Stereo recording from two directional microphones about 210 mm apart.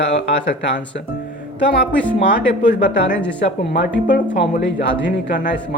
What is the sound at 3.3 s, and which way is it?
Speech, 55° left (ahead or behind).